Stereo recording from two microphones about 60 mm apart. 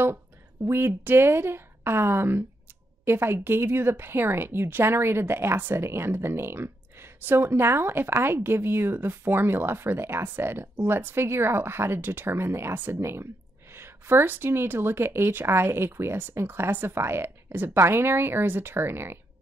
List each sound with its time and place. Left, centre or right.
0.7 s a woman's voice: right